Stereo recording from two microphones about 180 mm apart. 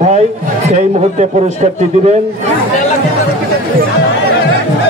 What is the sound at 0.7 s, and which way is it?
A man's voice, 40° right (ahead or behind).